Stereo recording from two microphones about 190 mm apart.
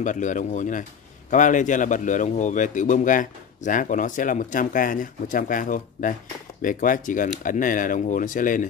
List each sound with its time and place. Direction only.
0.0 s a man's voice: 40° left (ahead or behind)